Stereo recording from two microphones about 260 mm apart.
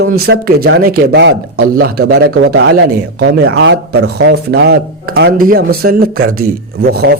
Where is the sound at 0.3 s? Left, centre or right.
Right.